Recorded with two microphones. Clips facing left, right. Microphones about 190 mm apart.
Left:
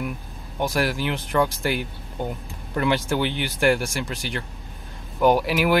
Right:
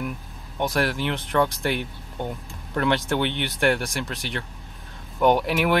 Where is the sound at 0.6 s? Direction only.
Centre (ahead or behind).